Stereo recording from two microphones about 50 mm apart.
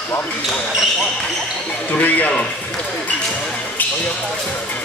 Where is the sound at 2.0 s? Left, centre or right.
Left.